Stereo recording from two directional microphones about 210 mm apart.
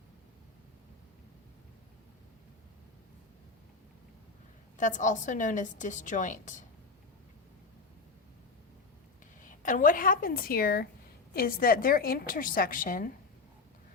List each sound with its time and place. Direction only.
4.8 s a woman's voice: 35° left (ahead or behind)
9.4 s a woman's voice: 40° left (ahead or behind)